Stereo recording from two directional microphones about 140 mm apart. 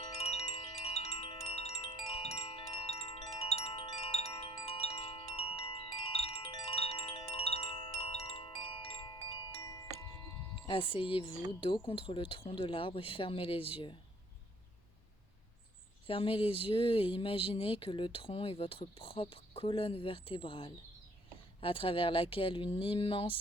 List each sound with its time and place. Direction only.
0.0 s wind chime: 50° left (ahead or behind)
0.8 s music: 50° left (ahead or behind)
3.3 s chime: 45° left (ahead or behind); by 9.8 s 25° left (ahead or behind)
10.5 s speech: 40° left (ahead or behind)
16.0 s speech: 40° left (ahead or behind)